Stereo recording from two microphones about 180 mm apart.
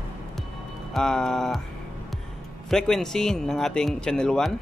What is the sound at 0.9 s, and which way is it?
Speech, 5° left (ahead or behind).